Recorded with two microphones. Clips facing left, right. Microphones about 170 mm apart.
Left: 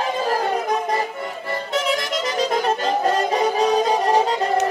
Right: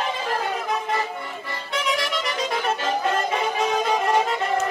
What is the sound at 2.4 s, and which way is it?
Music, 35° left (ahead or behind).